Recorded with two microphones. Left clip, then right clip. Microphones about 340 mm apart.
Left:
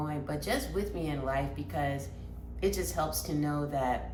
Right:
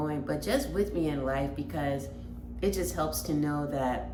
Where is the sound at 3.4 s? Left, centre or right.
Left.